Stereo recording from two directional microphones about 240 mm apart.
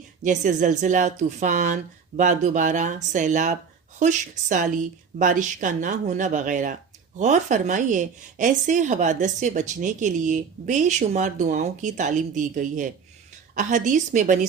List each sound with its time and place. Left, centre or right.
0.2 s speech: right